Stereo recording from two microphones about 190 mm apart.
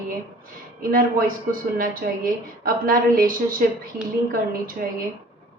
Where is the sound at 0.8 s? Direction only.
50° right (ahead or behind).